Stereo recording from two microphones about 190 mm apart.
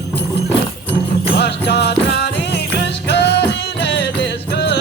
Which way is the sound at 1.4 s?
60° left (ahead or behind).